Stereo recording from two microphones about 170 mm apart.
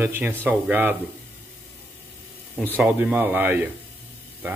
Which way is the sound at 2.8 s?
10° right (ahead or behind).